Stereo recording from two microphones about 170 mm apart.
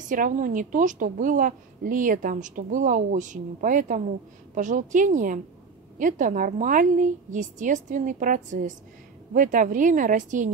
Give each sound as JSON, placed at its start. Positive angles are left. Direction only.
{"t": 0.1, "sound": "a woman's voice", "side_deg": -50}